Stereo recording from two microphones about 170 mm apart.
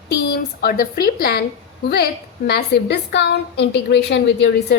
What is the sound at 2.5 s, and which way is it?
A woman's voice, 70° left (ahead or behind).